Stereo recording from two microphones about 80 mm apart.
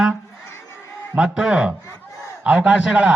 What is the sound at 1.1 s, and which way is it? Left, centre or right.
A man's voice, centre.